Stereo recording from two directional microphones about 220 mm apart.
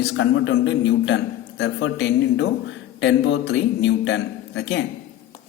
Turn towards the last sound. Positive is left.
turn(degrees=50)  # may be behind; listen again after turning